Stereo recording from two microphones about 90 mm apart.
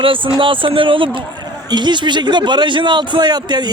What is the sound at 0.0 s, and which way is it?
Speech, 75° right (ahead or behind).